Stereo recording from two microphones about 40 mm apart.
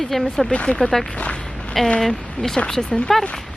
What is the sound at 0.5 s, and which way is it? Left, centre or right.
Speech, left.